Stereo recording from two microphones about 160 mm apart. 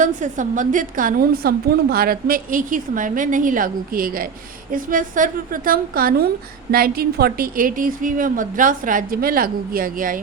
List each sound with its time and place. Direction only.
0.0 s a woman's voice: 50° right (ahead or behind)